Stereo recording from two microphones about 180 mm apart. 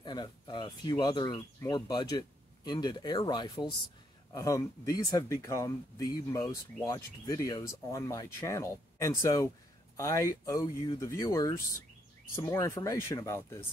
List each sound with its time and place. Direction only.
0.0 s speech: 25° left (ahead or behind)